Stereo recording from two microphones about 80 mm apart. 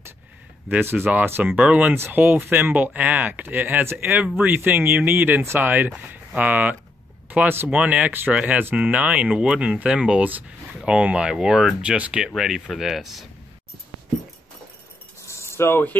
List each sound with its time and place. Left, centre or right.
0.7 s speech: right
2.0 s speech: right; by 13.3 s centre
15.2 s a sound: left